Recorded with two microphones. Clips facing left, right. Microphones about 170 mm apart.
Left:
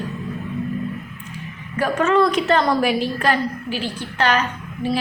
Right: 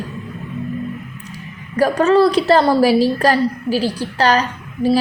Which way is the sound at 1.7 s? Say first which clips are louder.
Right 5 dB; 35° right (ahead or behind).